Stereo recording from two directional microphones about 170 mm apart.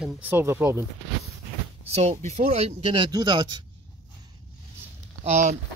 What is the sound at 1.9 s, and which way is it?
Speech, 40° right (ahead or behind).